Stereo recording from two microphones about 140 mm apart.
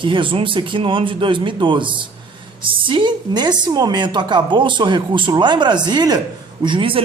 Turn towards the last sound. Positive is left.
turn(degrees=-35)  # may be behind; listen again after turning